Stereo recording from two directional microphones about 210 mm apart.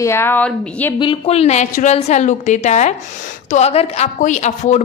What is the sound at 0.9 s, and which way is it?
A woman's voice, 25° left (ahead or behind).